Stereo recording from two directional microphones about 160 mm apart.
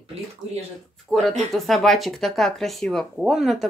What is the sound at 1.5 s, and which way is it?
Speech, centre (ahead or behind).